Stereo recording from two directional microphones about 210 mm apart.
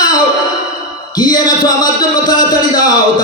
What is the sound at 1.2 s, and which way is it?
Music, 20° left (ahead or behind).